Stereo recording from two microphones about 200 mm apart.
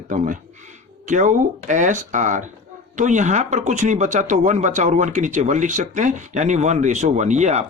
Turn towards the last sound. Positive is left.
turn(degrees=-35)  # may be behind; listen again after turning